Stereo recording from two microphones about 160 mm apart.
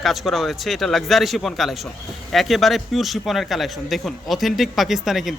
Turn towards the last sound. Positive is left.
turn(degrees=0)  # may be behind; listen again after turning